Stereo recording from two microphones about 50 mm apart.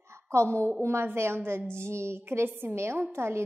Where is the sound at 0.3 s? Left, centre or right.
Right.